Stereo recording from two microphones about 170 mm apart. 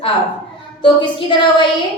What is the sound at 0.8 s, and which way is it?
Child singing, 30° left (ahead or behind).